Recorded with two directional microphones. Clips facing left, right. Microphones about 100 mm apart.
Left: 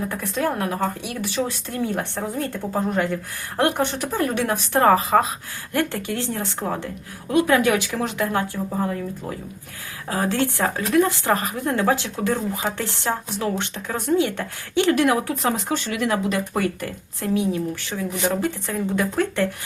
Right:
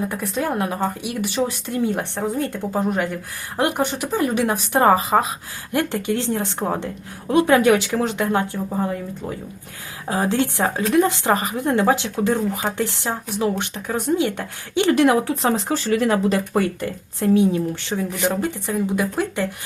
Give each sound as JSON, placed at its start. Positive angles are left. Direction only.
{"t": 0.1, "sound": "speech", "side_deg": -15}
{"t": 10.1, "sound": "speech", "side_deg": -20}
{"t": 18.6, "sound": "speech", "side_deg": -15}